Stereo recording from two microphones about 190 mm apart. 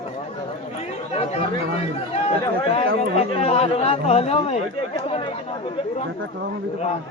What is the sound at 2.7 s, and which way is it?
Speech, 30° left (ahead or behind).